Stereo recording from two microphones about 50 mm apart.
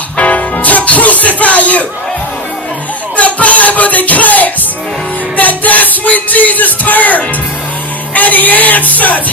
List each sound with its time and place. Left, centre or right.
0.2 s music: left
3.2 s music: left